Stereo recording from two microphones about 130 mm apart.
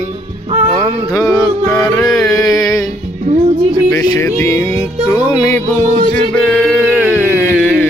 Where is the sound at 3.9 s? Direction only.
25° left (ahead or behind).